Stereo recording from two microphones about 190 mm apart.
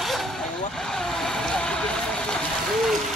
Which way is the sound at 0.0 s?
Centre (ahead or behind).